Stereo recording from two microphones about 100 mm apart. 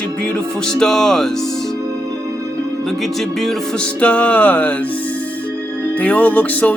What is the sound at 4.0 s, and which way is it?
Music, 15° left (ahead or behind).